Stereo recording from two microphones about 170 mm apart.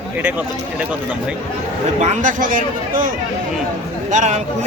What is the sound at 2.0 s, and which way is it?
Speech, 45° right (ahead or behind).